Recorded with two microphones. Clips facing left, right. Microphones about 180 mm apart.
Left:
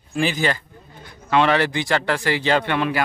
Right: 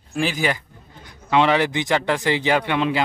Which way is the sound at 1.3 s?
15° right (ahead or behind).